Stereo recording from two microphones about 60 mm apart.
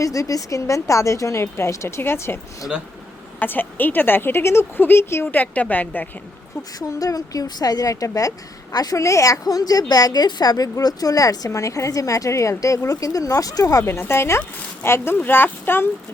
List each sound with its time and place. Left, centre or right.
0.0 s a woman's voice: left
3.4 s speech: left
5.2 s a woman's voice: left
6.7 s a woman's voice: left
8.7 s speech: left
14.1 s speech: left